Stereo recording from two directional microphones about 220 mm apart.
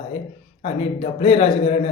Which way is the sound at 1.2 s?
25° left (ahead or behind).